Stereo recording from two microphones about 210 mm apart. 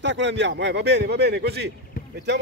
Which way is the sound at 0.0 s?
55° right (ahead or behind).